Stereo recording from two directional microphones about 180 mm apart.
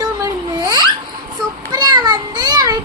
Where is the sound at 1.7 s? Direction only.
20° right (ahead or behind).